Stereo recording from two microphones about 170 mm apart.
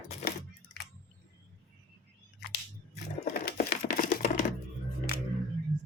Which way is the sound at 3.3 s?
60° left (ahead or behind).